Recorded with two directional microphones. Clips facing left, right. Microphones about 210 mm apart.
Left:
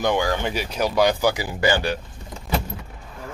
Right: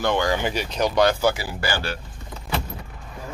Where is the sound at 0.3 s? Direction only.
Centre (ahead or behind); by 2.0 s 20° left (ahead or behind).